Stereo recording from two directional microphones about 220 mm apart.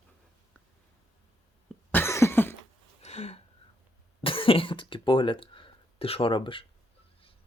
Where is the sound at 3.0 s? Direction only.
30° left (ahead or behind).